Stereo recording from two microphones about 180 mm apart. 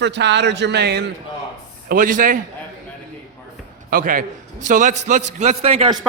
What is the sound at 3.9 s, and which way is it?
A man's voice, 50° right (ahead or behind).